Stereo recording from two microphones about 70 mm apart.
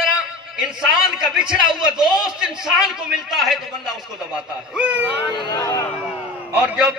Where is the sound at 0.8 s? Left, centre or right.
Centre.